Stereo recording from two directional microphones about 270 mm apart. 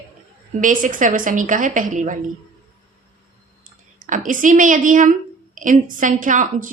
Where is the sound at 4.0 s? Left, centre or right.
Right.